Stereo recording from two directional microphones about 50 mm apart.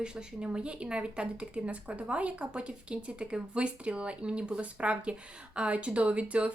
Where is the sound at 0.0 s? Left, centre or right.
Centre.